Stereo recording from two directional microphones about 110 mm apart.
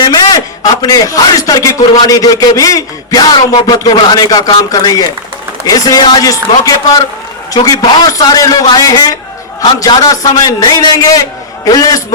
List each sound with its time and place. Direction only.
0.0 s a man's voice: 40° left (ahead or behind)